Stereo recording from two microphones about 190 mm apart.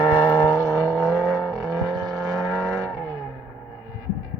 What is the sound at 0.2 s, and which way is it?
Vehicle, 10° right (ahead or behind).